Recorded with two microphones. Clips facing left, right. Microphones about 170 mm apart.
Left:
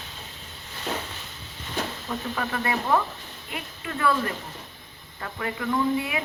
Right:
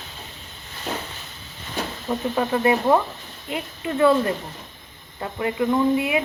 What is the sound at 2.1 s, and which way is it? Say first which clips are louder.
A woman's voice: right 8 dB; 25° right (ahead or behind).